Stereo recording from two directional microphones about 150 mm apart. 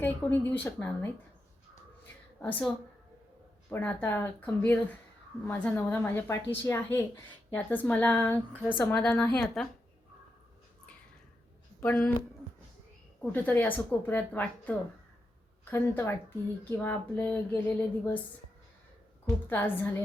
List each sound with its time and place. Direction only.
0.0 s speech: 15° left (ahead or behind)
2.4 s speech: 10° left (ahead or behind)
11.8 s speech: 10° left (ahead or behind)
13.3 s speech: 10° left (ahead or behind)
19.5 s speech: 15° left (ahead or behind)